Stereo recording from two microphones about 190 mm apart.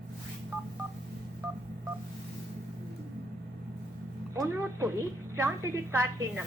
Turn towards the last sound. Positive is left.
turn(degrees=-15)  # may be behind; listen again after turning